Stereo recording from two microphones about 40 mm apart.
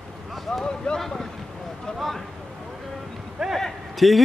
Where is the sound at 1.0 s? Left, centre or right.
Centre.